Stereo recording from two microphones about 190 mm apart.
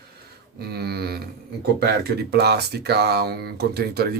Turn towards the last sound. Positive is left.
turn(degrees=-55)  # may be behind; listen again after turning